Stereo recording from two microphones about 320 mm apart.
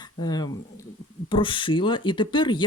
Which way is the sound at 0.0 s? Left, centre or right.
Centre.